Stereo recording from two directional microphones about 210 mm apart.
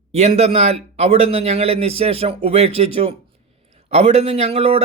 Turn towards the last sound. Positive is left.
turn(degrees=-30)  # may be behind; listen again after turning